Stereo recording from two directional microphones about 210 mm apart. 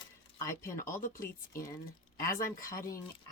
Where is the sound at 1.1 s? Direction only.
15° left (ahead or behind).